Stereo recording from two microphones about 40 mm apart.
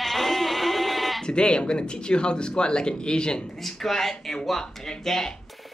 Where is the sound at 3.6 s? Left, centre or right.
Centre.